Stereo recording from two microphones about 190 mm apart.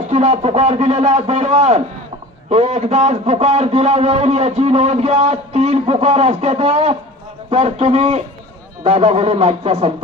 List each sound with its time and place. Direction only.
0.1 s a man's voice: 35° right (ahead or behind)